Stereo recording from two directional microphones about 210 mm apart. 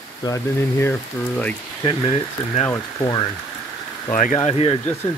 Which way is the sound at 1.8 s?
25° left (ahead or behind).